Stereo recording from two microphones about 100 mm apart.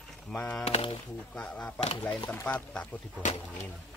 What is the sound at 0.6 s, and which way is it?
Speech, 90° left.